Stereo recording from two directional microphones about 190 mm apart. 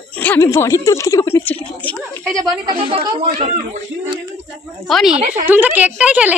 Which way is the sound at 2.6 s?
30° right (ahead or behind).